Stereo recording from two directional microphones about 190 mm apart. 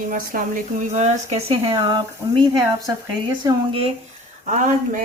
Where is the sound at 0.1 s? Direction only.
40° right (ahead or behind); by 2.4 s 25° right (ahead or behind).